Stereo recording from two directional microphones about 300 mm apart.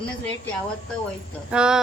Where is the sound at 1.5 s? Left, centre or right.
Centre.